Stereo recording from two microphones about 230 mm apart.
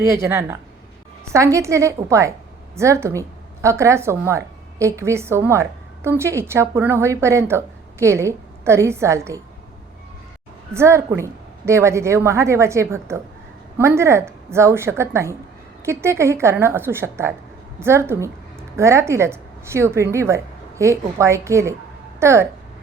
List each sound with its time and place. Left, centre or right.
0.0 s a woman's voice: centre
10.8 s a woman's voice: centre